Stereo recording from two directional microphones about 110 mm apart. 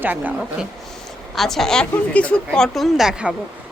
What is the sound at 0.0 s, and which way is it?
Speech, 15° right (ahead or behind).